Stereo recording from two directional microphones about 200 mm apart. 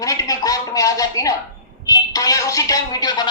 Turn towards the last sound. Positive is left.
turn(degrees=20)  # may be behind; listen again after turning